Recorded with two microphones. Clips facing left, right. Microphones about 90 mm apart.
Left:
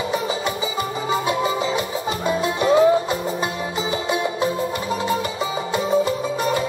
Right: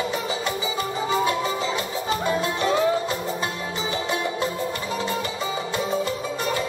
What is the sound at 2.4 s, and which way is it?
Music, 15° left (ahead or behind).